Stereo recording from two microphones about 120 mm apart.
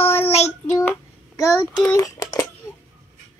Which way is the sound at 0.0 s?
20° left (ahead or behind).